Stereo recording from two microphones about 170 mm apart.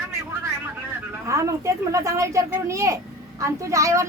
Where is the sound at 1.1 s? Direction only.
20° right (ahead or behind).